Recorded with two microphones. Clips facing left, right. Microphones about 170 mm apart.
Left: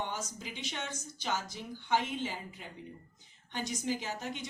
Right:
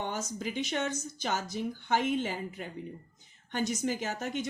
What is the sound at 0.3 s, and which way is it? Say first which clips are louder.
Speech: right 9 dB; 50° right (ahead or behind).